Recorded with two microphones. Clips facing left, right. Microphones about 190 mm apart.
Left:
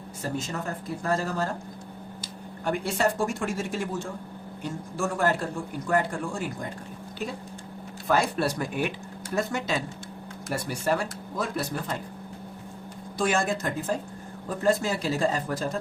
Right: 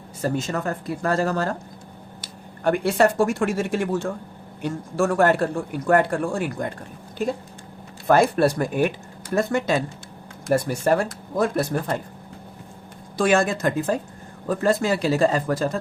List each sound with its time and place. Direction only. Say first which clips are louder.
0.2 s speech: right 7 dB; 70° right (ahead or behind)
2.2 s speech: right 8 dB; 65° right (ahead or behind)
7.2 s speech: right 9 dB; 50° right (ahead or behind)
13.1 s speech: right 6 dB; 90° right